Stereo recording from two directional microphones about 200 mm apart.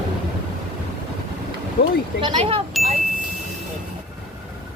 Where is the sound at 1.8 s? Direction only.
45° left (ahead or behind).